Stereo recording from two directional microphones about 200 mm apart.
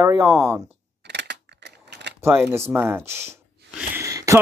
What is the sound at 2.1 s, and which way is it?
Gasp, 10° right (ahead or behind).